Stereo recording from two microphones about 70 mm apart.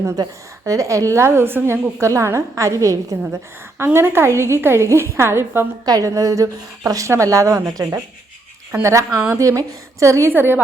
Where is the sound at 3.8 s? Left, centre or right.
Right.